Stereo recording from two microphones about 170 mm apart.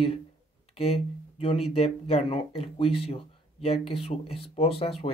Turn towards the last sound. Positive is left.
turn(degrees=35)  # may be behind; listen again after turning